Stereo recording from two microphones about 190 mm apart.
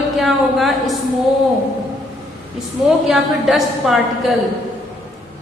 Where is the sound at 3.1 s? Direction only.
Centre (ahead or behind).